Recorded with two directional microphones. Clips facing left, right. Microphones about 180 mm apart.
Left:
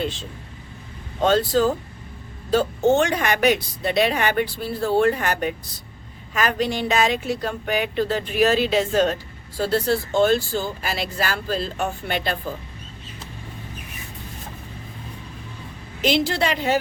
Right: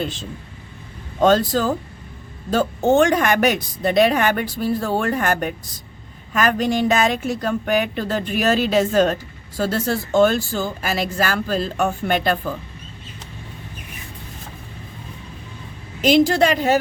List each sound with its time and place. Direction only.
1.2 s a woman's voice: 45° right (ahead or behind)
16.0 s a woman's voice: 45° right (ahead or behind)